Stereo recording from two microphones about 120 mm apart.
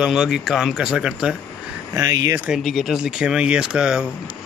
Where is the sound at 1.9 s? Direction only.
30° right (ahead or behind).